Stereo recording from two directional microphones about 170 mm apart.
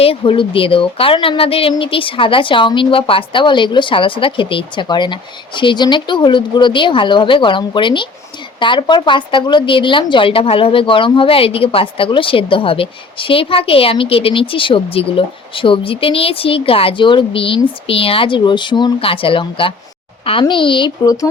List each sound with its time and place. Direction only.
0.0 s a woman's voice: 30° left (ahead or behind)